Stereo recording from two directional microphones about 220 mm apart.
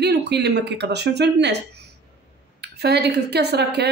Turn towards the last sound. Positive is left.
turn(degrees=-50)  # may be behind; listen again after turning